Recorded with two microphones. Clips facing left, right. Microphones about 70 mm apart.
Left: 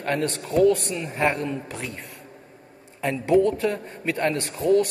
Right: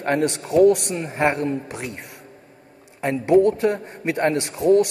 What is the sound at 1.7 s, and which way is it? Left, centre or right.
Speech, centre.